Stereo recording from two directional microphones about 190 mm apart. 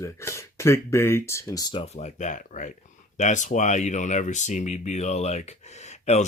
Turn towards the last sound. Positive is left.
turn(degrees=35)  # may be behind; listen again after turning